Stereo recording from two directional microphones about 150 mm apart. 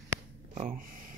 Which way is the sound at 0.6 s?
65° right (ahead or behind).